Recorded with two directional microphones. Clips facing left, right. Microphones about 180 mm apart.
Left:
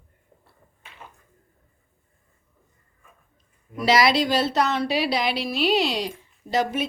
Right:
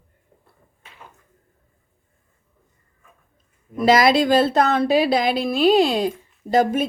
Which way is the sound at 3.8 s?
50° right (ahead or behind).